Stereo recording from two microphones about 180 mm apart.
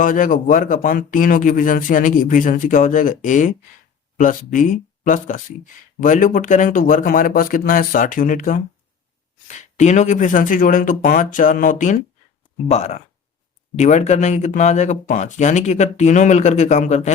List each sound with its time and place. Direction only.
0.0 s speech: 45° left (ahead or behind)
9.7 s speech: 40° left (ahead or behind)